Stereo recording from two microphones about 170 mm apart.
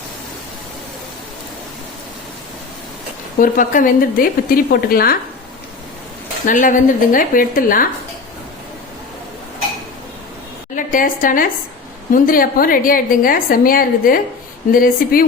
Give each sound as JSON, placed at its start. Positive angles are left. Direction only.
{"t": 3.3, "sound": "a woman's voice", "side_deg": 55}
{"t": 6.4, "sound": "speech", "side_deg": 50}
{"t": 10.8, "sound": "a woman's voice", "side_deg": 50}